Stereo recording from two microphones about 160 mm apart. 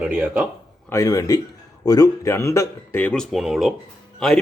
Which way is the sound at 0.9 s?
20° left (ahead or behind).